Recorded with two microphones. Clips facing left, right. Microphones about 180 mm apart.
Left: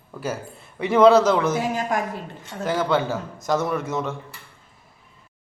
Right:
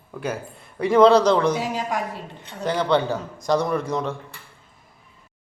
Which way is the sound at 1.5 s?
50° left (ahead or behind).